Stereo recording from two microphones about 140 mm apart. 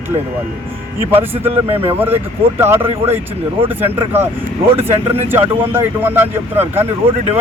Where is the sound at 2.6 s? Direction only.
20° right (ahead or behind).